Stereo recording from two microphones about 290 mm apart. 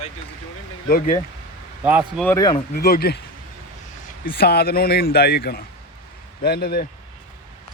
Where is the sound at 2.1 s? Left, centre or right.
Centre.